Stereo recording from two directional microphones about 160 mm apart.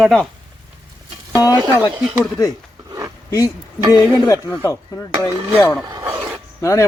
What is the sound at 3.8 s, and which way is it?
Speech, 25° right (ahead or behind).